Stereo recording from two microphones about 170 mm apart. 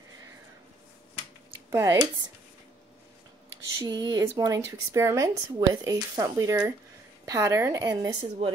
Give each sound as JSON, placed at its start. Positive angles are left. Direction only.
{"t": 1.7, "sound": "speech", "side_deg": -20}
{"t": 3.8, "sound": "speech", "side_deg": -25}